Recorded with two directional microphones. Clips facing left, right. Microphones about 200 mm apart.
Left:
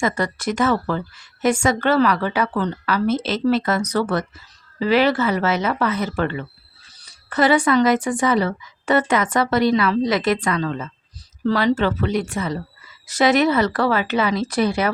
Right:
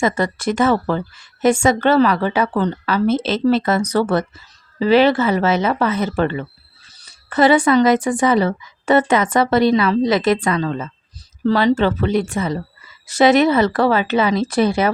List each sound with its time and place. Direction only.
0.0 s a woman's voice: 25° right (ahead or behind)